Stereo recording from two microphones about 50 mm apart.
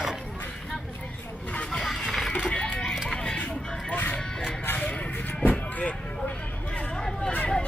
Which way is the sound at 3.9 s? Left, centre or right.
Left.